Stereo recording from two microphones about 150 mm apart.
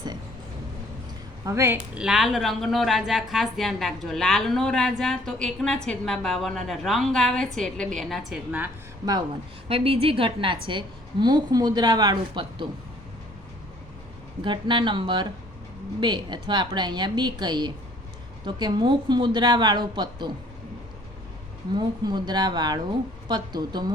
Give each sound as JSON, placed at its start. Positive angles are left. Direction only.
{"t": 1.5, "sound": "a woman's voice", "side_deg": -15}
{"t": 9.6, "sound": "a woman's voice", "side_deg": -40}
{"t": 14.4, "sound": "a woman's voice", "side_deg": -30}
{"t": 21.8, "sound": "a woman's voice", "side_deg": -30}